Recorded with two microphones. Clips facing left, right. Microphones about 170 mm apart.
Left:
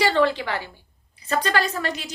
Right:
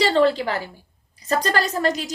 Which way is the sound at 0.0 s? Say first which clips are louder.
Right 3 dB; 35° right (ahead or behind).